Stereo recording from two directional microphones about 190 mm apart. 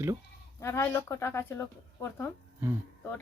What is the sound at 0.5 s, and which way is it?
Speech, 15° left (ahead or behind).